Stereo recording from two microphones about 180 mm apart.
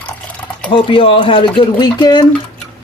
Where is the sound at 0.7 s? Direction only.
30° left (ahead or behind).